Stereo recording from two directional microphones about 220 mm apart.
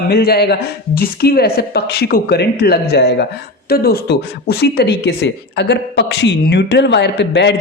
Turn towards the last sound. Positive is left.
turn(degrees=50)  # may be behind; listen again after turning